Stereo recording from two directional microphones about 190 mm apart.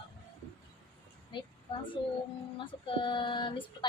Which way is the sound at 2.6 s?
25° left (ahead or behind).